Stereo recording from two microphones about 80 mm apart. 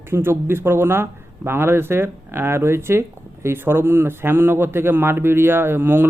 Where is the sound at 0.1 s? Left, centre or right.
Right.